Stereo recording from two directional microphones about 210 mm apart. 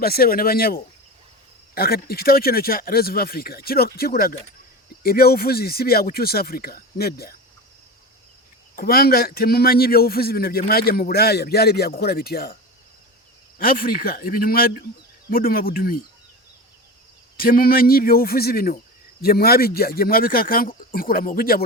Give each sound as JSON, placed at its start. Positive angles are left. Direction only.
{"t": 0.0, "sound": "a man's voice", "side_deg": 45}
{"t": 8.7, "sound": "a man's voice", "side_deg": 45}
{"t": 13.6, "sound": "a man's voice", "side_deg": 45}
{"t": 17.3, "sound": "a man's voice", "side_deg": 45}